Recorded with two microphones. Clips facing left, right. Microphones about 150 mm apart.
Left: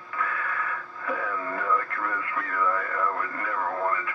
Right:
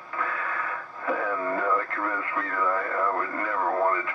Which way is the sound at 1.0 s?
30° right (ahead or behind).